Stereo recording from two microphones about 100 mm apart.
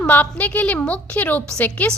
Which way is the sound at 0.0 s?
15° left (ahead or behind).